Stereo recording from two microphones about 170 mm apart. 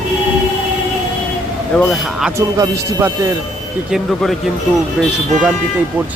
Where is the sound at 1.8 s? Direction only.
Centre (ahead or behind).